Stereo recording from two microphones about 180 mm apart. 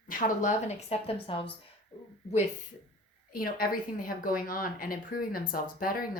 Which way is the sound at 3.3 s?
55° left (ahead or behind).